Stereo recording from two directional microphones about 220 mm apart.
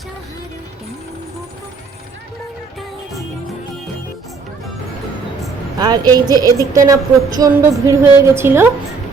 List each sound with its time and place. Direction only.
5.8 s a woman's voice: 20° right (ahead or behind)